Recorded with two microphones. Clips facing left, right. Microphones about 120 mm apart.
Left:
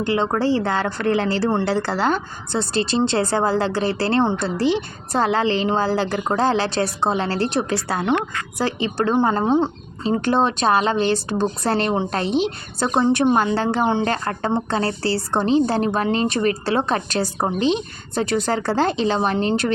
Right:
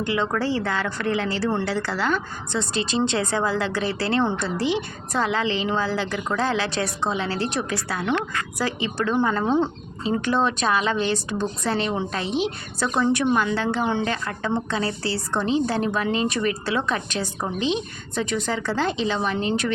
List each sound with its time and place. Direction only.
0.0 s a woman's voice: 30° left (ahead or behind)